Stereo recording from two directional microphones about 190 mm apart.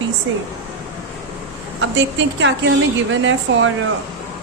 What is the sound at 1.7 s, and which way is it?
Speech, 75° right (ahead or behind).